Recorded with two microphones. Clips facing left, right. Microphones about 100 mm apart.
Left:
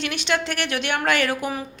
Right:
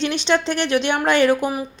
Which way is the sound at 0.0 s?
25° right (ahead or behind).